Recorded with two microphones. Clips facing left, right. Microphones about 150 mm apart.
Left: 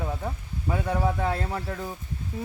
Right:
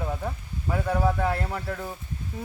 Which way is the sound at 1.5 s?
10° left (ahead or behind).